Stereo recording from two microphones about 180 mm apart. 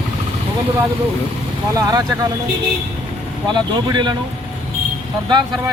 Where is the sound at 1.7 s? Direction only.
20° right (ahead or behind).